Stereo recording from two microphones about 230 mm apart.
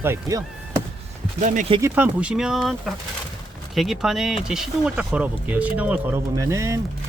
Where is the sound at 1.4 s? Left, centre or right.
Right.